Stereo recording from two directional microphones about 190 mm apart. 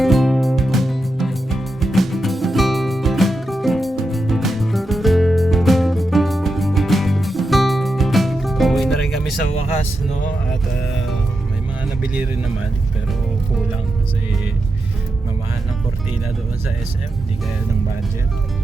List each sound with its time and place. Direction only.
0.0 s music: centre (ahead or behind)
12.0 s music: 10° right (ahead or behind)